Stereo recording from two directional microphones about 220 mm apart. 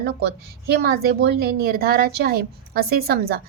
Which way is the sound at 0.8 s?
45° right (ahead or behind).